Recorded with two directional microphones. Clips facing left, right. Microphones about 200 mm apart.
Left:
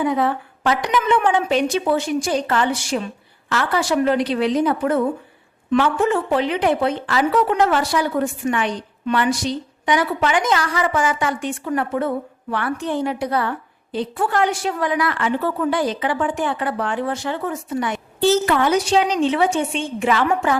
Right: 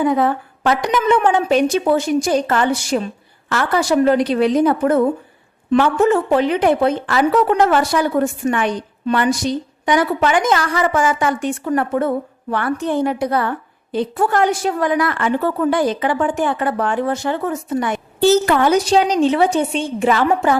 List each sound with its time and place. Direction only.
0.0 s speech: 45° right (ahead or behind)